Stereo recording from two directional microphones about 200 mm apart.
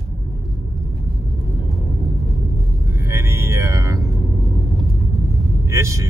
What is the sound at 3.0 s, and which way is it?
Speech, 15° right (ahead or behind).